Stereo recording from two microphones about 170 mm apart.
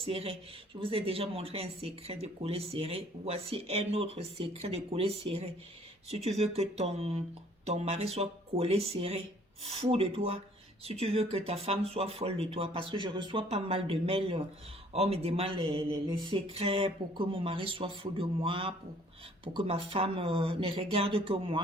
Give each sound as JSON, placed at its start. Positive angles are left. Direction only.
{"t": 0.0, "sound": "speech", "side_deg": -35}